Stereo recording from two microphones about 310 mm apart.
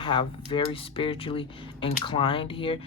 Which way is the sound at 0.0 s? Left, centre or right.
Centre.